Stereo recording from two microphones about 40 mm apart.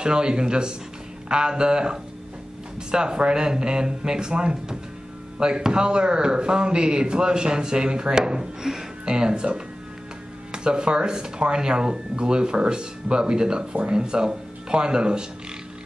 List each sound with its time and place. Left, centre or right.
0.0 s a man's voice: right